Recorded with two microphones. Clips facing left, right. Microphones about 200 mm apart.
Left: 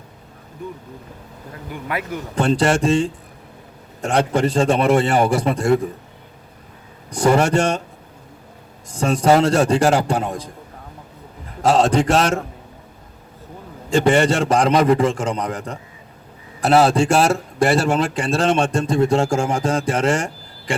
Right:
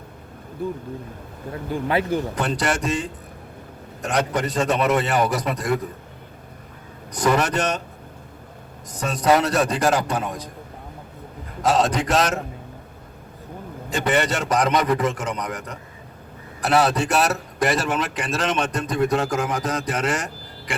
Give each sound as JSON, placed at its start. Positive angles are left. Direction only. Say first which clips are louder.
{"t": 1.7, "sound": "speech", "louder": "right 5 dB", "side_deg": -30}
{"t": 2.3, "sound": "a man's voice", "louder": "left 6 dB", "side_deg": 30}
{"t": 7.1, "sound": "a man's voice", "louder": "left 5 dB", "side_deg": 30}
{"t": 8.9, "sound": "a man's voice", "louder": "left 4 dB", "side_deg": 30}
{"t": 11.6, "sound": "a man's voice", "louder": "left 5 dB", "side_deg": 30}
{"t": 13.9, "sound": "a man's voice", "louder": "left 6 dB", "side_deg": 30}